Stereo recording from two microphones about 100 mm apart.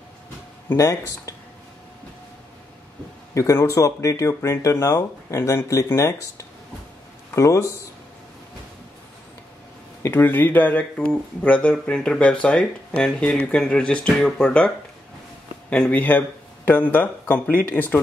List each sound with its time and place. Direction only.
0.7 s speech: 35° left (ahead or behind)
3.3 s speech: 30° left (ahead or behind)
10.0 s speech: 20° left (ahead or behind)
15.7 s speech: 15° left (ahead or behind)